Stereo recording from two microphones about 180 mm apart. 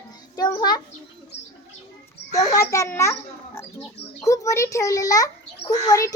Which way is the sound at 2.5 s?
15° left (ahead or behind).